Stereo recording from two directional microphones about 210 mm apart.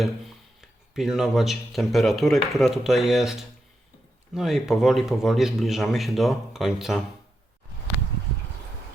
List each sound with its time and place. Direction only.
0.9 s speech: centre (ahead or behind)